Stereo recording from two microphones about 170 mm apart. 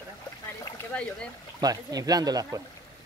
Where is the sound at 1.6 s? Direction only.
20° right (ahead or behind).